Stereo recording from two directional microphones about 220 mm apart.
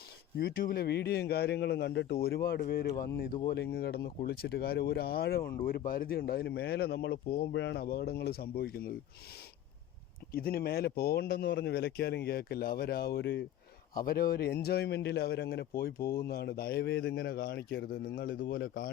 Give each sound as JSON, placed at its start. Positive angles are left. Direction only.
{"t": 0.3, "sound": "speech", "side_deg": 40}
{"t": 2.9, "sound": "speech", "side_deg": 15}
{"t": 3.2, "sound": "speech", "side_deg": 40}
{"t": 10.3, "sound": "speech", "side_deg": 45}